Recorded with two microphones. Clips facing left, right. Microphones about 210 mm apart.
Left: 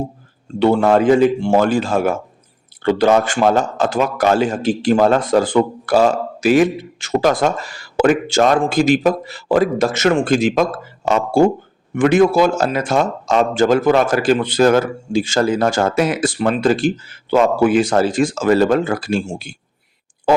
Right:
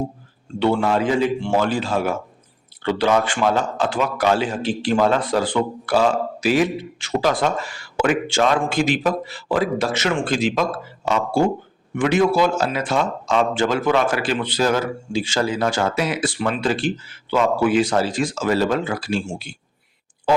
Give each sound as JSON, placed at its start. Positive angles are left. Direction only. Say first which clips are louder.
{"t": 0.6, "sound": "a man's voice", "louder": "left 6 dB", "side_deg": 45}